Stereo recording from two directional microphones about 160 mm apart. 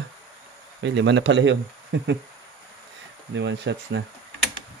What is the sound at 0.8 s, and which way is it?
Speech, 90° right.